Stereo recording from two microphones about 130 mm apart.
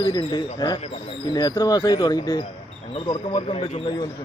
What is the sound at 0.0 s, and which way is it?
A man's voice, 35° left (ahead or behind).